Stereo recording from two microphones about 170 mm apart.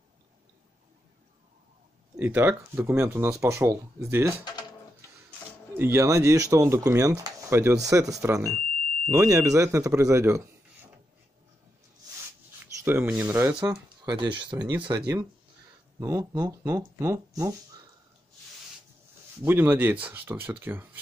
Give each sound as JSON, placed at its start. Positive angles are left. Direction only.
{"t": 2.1, "sound": "speech", "side_deg": -10}
{"t": 5.8, "sound": "speech", "side_deg": -15}
{"t": 12.8, "sound": "speech", "side_deg": -10}
{"t": 14.9, "sound": "speech", "side_deg": -10}
{"t": 19.4, "sound": "speech", "side_deg": -10}